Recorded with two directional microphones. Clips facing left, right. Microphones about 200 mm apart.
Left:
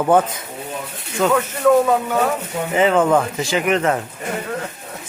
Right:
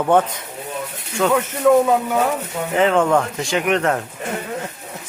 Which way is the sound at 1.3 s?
5° right (ahead or behind).